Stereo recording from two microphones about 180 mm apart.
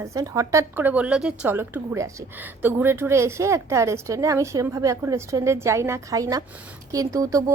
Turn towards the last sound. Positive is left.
turn(degrees=-20)  # may be behind; listen again after turning